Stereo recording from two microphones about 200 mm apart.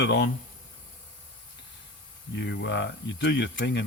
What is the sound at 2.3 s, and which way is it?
Speech, 60° left (ahead or behind).